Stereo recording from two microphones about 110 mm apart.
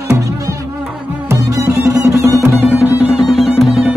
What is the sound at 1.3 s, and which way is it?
Music, 25° right (ahead or behind).